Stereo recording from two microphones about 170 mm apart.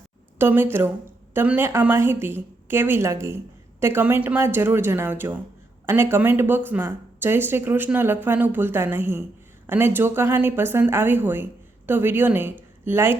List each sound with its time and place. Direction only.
0.3 s a woman's voice: 10° right (ahead or behind)